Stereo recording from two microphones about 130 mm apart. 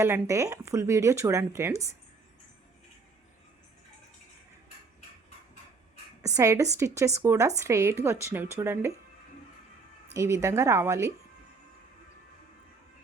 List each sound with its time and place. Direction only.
0.0 s speech: 20° right (ahead or behind)
6.2 s speech: 25° right (ahead or behind)
10.2 s speech: 25° right (ahead or behind)